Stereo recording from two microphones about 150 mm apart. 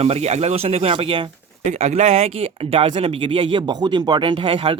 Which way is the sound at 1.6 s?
50° right (ahead or behind).